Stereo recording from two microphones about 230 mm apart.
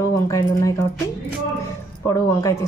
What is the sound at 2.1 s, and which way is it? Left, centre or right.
Speech, centre.